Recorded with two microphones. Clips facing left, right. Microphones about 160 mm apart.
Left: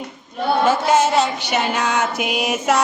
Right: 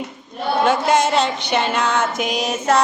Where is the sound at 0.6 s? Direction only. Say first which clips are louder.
Even; 5° left (ahead or behind).